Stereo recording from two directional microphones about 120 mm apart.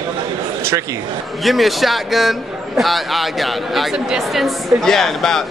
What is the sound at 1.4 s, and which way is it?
A woman's voice, centre (ahead or behind).